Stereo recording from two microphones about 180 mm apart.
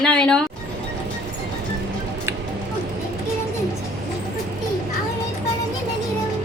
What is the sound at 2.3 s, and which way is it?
Music, 15° right (ahead or behind).